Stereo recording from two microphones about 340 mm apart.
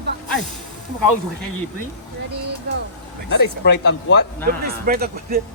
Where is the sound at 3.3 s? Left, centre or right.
Left.